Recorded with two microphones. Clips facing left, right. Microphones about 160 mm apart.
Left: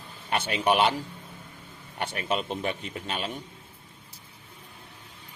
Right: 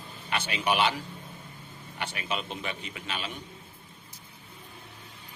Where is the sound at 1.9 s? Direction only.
45° left (ahead or behind).